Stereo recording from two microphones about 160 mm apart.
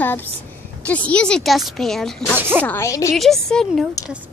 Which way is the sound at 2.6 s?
15° left (ahead or behind).